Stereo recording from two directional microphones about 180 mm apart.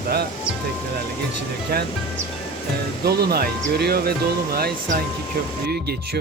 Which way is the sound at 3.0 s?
60° right (ahead or behind).